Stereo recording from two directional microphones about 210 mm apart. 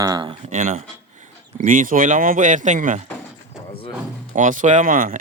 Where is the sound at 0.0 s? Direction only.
20° right (ahead or behind); by 3.0 s 35° right (ahead or behind).